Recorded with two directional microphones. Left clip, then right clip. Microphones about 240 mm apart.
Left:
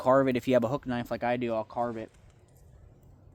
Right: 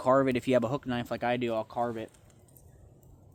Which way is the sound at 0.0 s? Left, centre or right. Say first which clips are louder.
Left 1 dB; centre.